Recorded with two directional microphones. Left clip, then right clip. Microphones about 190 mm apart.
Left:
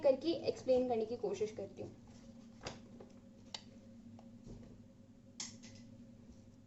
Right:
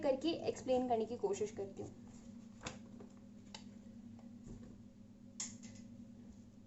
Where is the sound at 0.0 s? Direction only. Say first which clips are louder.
Left 4 dB; 40° right (ahead or behind).